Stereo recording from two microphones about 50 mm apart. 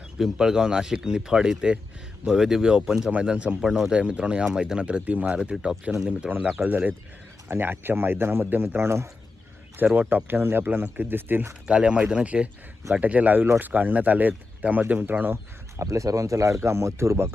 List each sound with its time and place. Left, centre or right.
0.2 s speech: centre
3.6 s speech: centre
3.9 s speech: right
4.8 s speech: right
5.3 s speech: centre
6.3 s speech: right
9.7 s speech: right
10.2 s speech: right
11.7 s speech: right
15.8 s speech: right
16.6 s speech: right